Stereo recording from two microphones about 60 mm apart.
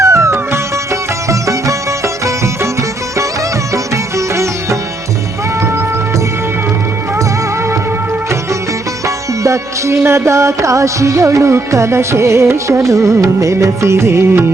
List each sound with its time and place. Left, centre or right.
0.0 s music: right
3.9 s sitar: right
9.0 s music: right